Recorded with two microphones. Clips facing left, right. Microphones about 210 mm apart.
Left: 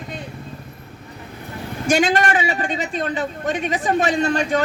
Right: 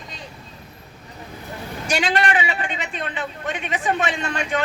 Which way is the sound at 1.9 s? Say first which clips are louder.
Left 4 dB; 45° left (ahead or behind).